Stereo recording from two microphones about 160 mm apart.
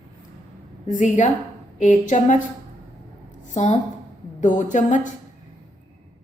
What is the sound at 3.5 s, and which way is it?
A woman's voice, 45° left (ahead or behind).